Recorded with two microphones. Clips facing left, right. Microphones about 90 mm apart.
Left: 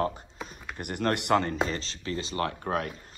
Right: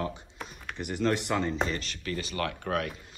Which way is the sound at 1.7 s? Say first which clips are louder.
Left 1 dB; 30° left (ahead or behind).